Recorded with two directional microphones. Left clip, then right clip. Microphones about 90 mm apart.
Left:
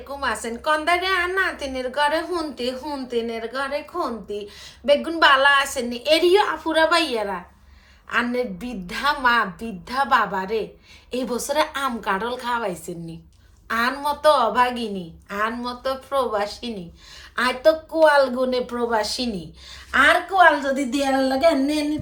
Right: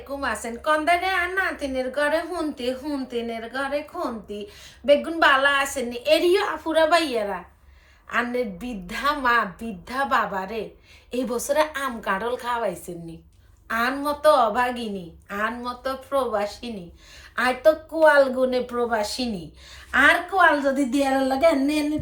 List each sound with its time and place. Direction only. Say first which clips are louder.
0.1 s a woman's voice: left 2 dB; 20° left (ahead or behind)
20.3 s speech: left 2 dB; 20° right (ahead or behind)